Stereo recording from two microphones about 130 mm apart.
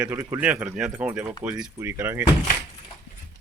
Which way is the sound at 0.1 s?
20° right (ahead or behind).